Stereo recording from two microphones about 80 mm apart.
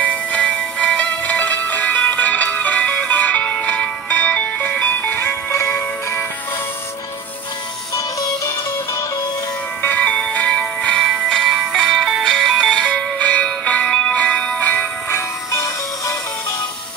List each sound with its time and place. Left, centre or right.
0.0 s music: centre
9.8 s music: left